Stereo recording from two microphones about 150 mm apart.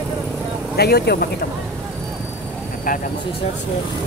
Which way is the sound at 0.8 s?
90° left.